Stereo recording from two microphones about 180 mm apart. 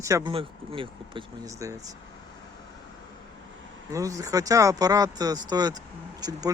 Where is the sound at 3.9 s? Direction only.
20° right (ahead or behind).